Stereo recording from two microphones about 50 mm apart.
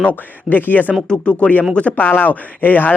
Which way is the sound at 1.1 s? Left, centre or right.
Left.